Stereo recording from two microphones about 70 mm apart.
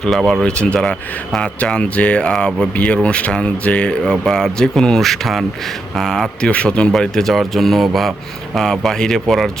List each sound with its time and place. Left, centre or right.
0.0 s speech: centre
6.9 s speech: centre